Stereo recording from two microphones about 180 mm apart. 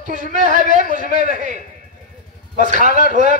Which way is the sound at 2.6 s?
40° right (ahead or behind).